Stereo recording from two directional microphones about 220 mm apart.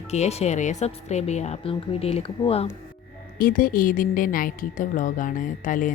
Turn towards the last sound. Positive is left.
turn(degrees=35)  # may be behind; listen again after turning